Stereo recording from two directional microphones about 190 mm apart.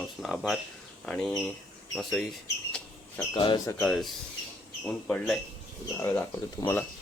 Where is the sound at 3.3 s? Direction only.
25° left (ahead or behind).